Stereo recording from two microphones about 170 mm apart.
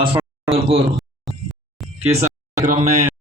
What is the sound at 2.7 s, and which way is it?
Speech, 45° right (ahead or behind).